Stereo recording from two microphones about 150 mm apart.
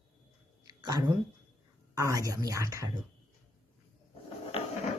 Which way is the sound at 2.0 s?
20° right (ahead or behind).